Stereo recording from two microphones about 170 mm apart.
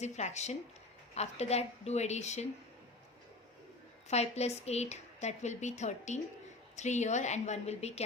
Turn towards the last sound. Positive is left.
turn(degrees=40)  # may be behind; listen again after turning